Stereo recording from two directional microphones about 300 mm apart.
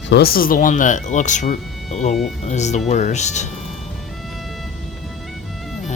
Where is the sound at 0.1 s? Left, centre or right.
Left.